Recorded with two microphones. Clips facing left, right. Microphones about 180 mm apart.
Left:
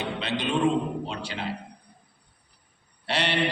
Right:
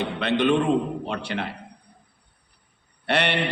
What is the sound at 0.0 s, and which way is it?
A man's voice, 60° right (ahead or behind).